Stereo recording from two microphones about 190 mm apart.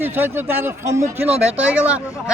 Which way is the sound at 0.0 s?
10° right (ahead or behind).